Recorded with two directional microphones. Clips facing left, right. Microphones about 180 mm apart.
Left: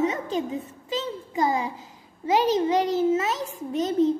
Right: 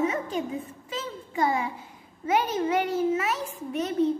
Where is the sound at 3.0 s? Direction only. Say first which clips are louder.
Left 3 dB; 20° left (ahead or behind).